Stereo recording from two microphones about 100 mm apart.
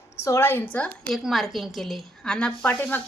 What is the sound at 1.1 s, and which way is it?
A woman's voice, centre (ahead or behind).